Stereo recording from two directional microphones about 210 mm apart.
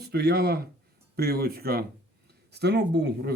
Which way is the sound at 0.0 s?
50° right (ahead or behind).